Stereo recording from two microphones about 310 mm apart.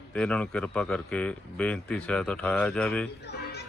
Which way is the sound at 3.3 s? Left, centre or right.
Left.